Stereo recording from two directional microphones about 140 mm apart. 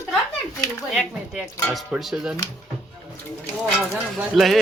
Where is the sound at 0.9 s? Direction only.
5° left (ahead or behind).